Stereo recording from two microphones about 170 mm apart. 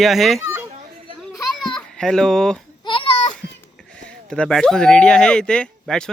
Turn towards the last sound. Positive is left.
turn(degrees=5)  # may be behind; listen again after turning